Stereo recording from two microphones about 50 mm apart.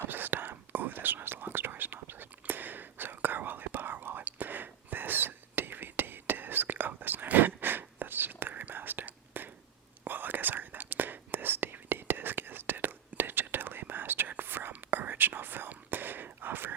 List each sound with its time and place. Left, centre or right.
0.1 s whispering: right